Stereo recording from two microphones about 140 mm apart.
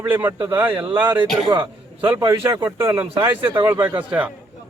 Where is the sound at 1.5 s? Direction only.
30° right (ahead or behind).